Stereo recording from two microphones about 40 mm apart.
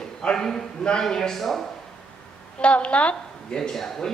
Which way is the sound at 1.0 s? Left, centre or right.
Centre.